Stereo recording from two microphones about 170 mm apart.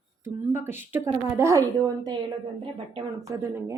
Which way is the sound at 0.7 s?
15° right (ahead or behind).